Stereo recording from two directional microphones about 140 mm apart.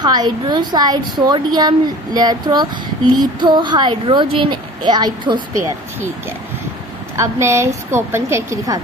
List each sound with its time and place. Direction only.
0.0 s a woman's voice: 30° right (ahead or behind)
7.2 s a woman's voice: 20° right (ahead or behind)